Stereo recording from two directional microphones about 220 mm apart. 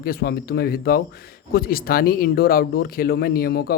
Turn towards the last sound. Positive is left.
turn(degrees=45)  # may be behind; listen again after turning